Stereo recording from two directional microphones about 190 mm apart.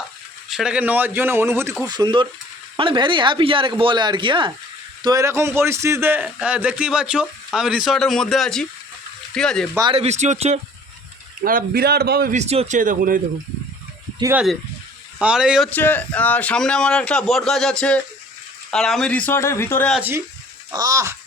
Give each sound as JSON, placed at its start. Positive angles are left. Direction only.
{"t": 0.5, "sound": "a man's voice", "side_deg": -5}
{"t": 9.9, "sound": "speech", "side_deg": -35}
{"t": 11.4, "sound": "a man's voice", "side_deg": -50}
{"t": 12.3, "sound": "speech", "side_deg": -35}
{"t": 14.2, "sound": "a man's voice", "side_deg": -15}
{"t": 15.7, "sound": "a man's voice", "side_deg": 10}
{"t": 19.9, "sound": "a man's voice", "side_deg": -10}